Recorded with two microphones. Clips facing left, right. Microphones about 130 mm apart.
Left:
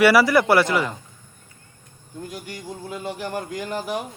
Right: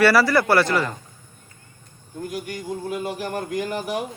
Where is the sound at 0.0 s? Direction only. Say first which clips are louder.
Left 1 dB; 15° left (ahead or behind).